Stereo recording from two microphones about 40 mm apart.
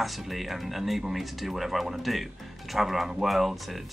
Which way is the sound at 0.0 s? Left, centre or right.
Centre.